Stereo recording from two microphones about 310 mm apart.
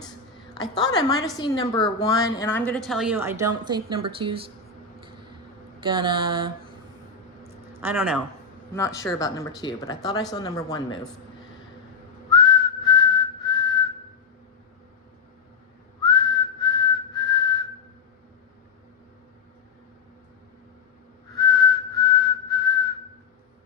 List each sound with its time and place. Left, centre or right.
0.8 s a woman's voice: centre
5.8 s mantra: centre
7.8 s speech: centre
8.7 s speech: centre
12.3 s whistling: centre
16.0 s whistling: centre
21.3 s whistling: centre